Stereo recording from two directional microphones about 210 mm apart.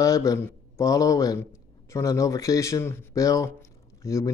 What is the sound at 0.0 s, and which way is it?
Speech, 15° left (ahead or behind).